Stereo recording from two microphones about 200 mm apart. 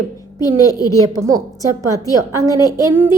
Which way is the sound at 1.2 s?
15° right (ahead or behind).